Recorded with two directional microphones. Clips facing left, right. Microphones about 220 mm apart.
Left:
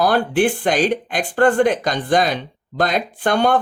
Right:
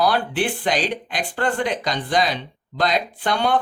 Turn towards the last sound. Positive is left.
turn(degrees=50)  # may be behind; listen again after turning